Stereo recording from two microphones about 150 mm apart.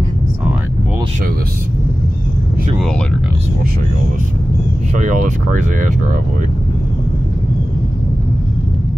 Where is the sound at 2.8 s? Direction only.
5° left (ahead or behind).